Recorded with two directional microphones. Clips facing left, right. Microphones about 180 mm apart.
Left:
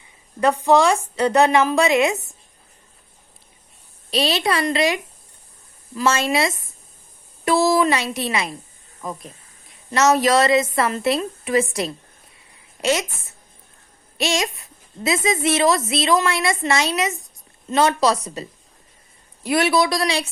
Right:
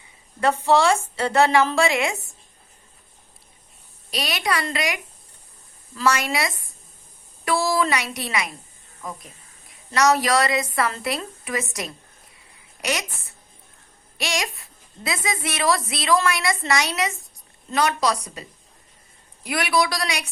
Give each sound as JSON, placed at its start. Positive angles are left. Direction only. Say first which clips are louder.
{"t": 0.3, "sound": "a woman's voice", "louder": "left 3 dB", "side_deg": 15}
{"t": 4.1, "sound": "a child's voice", "louder": "left 5 dB", "side_deg": 25}
{"t": 9.9, "sound": "a child's voice", "louder": "left 3 dB", "side_deg": 25}